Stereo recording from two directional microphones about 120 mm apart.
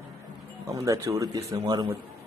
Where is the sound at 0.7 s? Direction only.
25° right (ahead or behind).